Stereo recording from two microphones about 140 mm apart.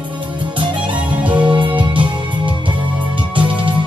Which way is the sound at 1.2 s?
10° right (ahead or behind).